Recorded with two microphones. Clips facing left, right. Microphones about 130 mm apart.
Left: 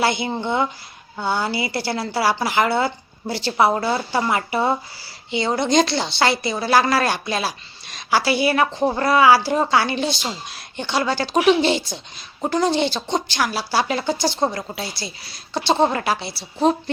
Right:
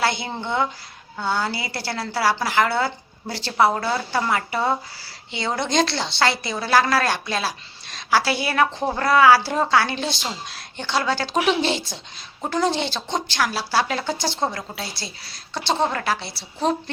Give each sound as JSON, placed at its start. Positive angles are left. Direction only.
{"t": 0.0, "sound": "a woman's voice", "side_deg": 5}
{"t": 15.5, "sound": "a woman's voice", "side_deg": 15}